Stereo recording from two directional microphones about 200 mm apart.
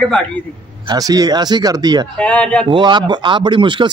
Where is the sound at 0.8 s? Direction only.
20° right (ahead or behind).